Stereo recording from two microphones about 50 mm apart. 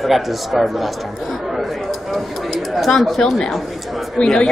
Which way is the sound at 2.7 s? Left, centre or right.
Centre.